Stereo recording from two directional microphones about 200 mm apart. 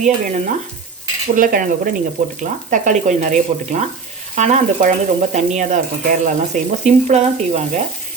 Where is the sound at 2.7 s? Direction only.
40° right (ahead or behind).